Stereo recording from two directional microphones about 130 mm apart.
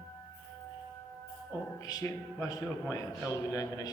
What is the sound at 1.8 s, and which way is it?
A man's voice, 30° left (ahead or behind).